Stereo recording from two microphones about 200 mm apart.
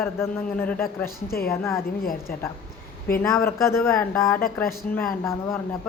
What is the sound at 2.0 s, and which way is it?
Speech, 45° left (ahead or behind).